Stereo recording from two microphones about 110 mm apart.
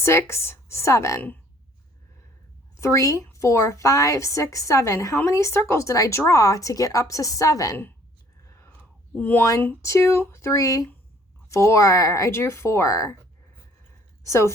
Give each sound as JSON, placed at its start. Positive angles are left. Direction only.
{"t": 0.0, "sound": "a woman's voice", "side_deg": 25}
{"t": 2.7, "sound": "a woman's voice", "side_deg": 25}
{"t": 8.4, "sound": "a sound", "side_deg": 25}
{"t": 9.1, "sound": "speech", "side_deg": 15}
{"t": 9.8, "sound": "a woman's voice", "side_deg": 25}
{"t": 14.3, "sound": "a woman's voice", "side_deg": 25}